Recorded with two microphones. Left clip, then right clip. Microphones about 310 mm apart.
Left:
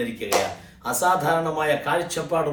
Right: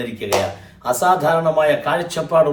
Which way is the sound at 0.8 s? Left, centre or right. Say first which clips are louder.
Right 5 dB; centre.